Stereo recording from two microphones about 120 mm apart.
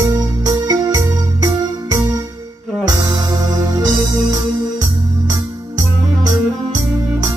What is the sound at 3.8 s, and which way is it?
Organ, 30° right (ahead or behind).